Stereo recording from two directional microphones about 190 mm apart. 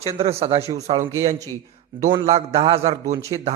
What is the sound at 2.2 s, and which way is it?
Speech, 35° right (ahead or behind).